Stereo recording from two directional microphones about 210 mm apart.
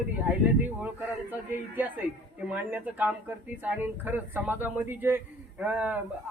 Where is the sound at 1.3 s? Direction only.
10° right (ahead or behind).